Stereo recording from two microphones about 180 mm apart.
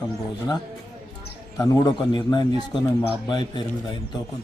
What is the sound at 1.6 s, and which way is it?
A man's voice, 20° left (ahead or behind).